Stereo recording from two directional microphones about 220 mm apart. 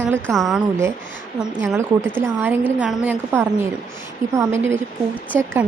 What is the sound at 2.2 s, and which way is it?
A woman's voice, 10° right (ahead or behind).